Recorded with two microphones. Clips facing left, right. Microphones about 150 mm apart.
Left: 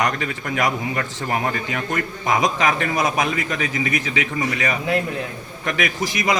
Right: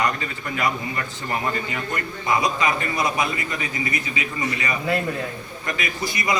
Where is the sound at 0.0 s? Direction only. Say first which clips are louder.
Left 2 dB; 70° left (ahead or behind).